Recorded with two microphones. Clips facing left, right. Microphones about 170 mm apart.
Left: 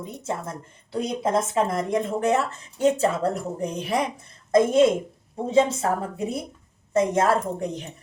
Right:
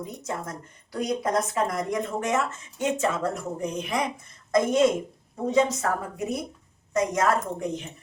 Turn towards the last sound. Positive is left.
turn(degrees=30)  # may be behind; listen again after turning